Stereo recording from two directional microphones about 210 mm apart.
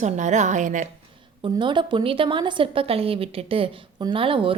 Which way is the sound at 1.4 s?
20° right (ahead or behind).